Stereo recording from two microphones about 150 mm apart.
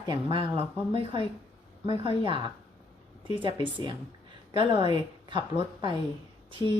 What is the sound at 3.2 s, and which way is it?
A woman's voice, 35° right (ahead or behind).